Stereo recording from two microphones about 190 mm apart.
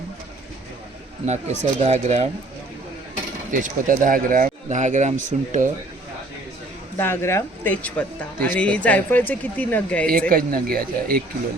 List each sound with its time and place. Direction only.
1.2 s speech: 35° right (ahead or behind)
3.5 s speech: 45° right (ahead or behind)
6.9 s speech: 10° left (ahead or behind)
10.1 s speech: 50° right (ahead or behind)